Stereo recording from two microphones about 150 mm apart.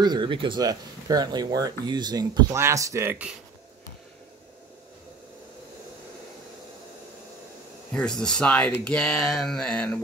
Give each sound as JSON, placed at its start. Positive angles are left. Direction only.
{"t": 0.0, "sound": "speech", "side_deg": -30}
{"t": 7.9, "sound": "speech", "side_deg": 5}